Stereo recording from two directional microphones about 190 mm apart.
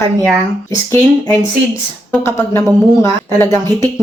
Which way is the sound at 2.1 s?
15° left (ahead or behind).